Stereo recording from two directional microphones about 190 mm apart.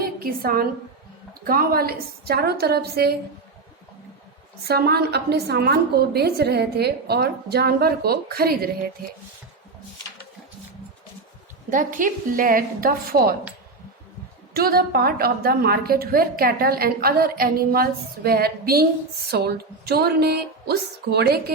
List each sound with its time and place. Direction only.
0.0 s a woman's voice: 50° right (ahead or behind)
4.7 s a woman's voice: 55° right (ahead or behind)
11.7 s a woman's voice: 45° right (ahead or behind)
14.5 s a woman's voice: 50° right (ahead or behind)